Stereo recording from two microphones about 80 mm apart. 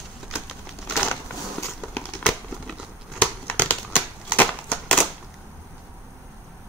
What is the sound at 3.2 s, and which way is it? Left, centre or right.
Crumpling, centre.